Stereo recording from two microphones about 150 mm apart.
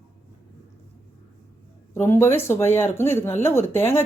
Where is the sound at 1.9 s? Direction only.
15° left (ahead or behind).